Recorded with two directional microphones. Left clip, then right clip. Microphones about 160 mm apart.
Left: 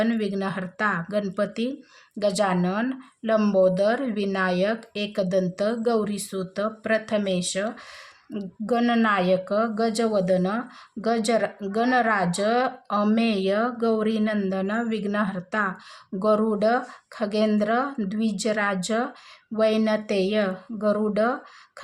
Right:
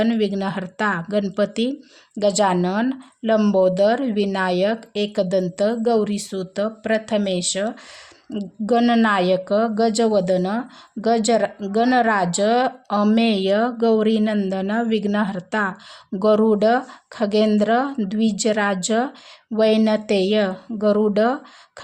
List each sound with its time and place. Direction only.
0.0 s a woman's voice: 30° right (ahead or behind)